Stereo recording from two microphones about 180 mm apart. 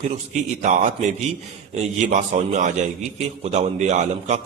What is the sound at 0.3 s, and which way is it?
A man's voice, 45° right (ahead or behind).